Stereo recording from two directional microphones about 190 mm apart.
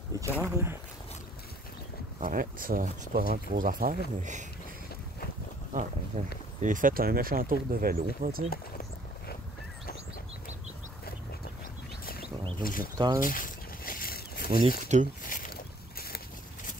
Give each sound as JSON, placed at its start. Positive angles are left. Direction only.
{"t": 0.4, "sound": "speech", "side_deg": -15}
{"t": 2.1, "sound": "speech", "side_deg": -45}
{"t": 5.7, "sound": "speech", "side_deg": -40}
{"t": 12.6, "sound": "speech", "side_deg": 50}
{"t": 12.9, "sound": "speech", "side_deg": -20}
{"t": 13.2, "sound": "a sound", "side_deg": 45}
{"t": 14.9, "sound": "speech", "side_deg": -40}
{"t": 15.2, "sound": "boat", "side_deg": 45}